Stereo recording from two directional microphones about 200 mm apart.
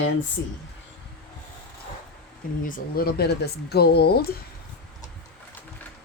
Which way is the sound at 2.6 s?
45° left (ahead or behind).